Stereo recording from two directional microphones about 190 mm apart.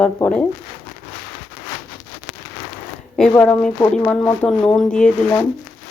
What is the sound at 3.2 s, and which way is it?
Speech, 5° left (ahead or behind).